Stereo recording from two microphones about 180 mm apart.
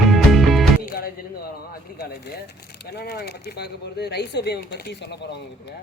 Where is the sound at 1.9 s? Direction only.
60° left (ahead or behind).